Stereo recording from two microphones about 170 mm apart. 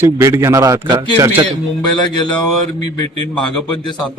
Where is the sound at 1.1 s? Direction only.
15° right (ahead or behind).